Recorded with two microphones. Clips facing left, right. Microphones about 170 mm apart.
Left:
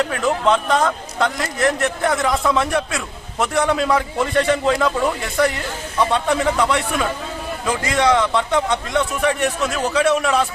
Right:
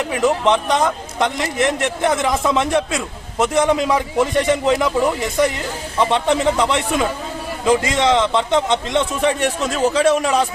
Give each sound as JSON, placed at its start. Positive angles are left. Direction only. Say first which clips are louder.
{"t": 0.0, "sound": "a man's voice", "louder": "right 2 dB", "side_deg": -15}